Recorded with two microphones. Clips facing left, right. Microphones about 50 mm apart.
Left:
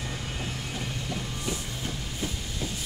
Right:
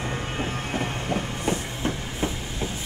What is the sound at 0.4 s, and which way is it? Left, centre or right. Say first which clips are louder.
Train: right 7 dB; right.